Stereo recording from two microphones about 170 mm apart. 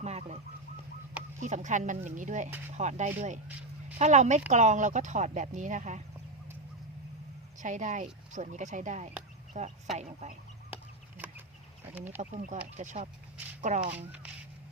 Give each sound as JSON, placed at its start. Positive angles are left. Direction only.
{"t": 0.0, "sound": "goose", "side_deg": -40}
{"t": 1.4, "sound": "speech", "side_deg": -45}
{"t": 7.6, "sound": "speech", "side_deg": -45}
{"t": 11.9, "sound": "speech", "side_deg": -10}
{"t": 12.2, "sound": "speech", "side_deg": -45}